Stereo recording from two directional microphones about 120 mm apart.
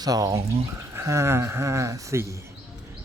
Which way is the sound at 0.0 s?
30° right (ahead or behind).